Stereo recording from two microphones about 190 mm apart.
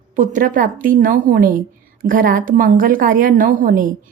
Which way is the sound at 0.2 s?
45° right (ahead or behind).